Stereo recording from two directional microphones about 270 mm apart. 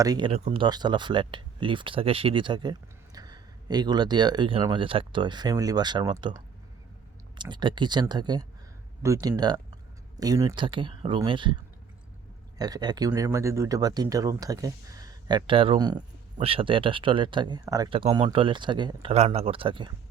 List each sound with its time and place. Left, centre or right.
0.0 s speech: centre
7.3 s speech: centre